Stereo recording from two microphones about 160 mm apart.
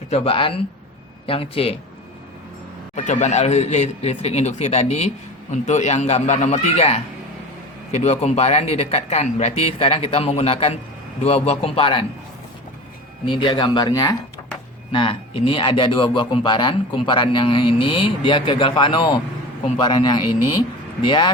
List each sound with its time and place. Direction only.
0.1 s speech: 35° left (ahead or behind)
2.9 s speech: 45° left (ahead or behind)
13.2 s speech: 30° left (ahead or behind)
14.9 s speech: 35° left (ahead or behind)